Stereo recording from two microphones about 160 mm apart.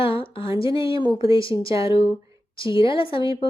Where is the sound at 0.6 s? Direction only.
35° left (ahead or behind).